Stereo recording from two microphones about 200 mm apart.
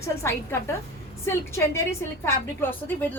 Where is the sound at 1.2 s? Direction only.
15° left (ahead or behind).